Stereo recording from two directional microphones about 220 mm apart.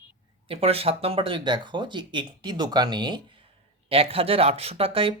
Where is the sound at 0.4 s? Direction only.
25° right (ahead or behind).